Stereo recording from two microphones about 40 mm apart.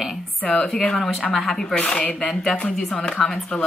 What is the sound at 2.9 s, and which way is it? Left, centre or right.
Speech, left.